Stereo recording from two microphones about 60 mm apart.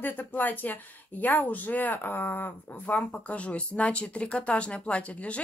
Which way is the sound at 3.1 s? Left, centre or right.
Left.